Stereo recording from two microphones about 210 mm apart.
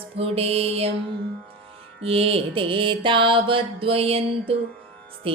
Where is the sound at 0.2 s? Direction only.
30° right (ahead or behind).